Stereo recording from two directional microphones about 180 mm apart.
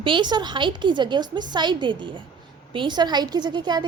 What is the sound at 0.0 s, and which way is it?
A woman's voice, 25° right (ahead or behind).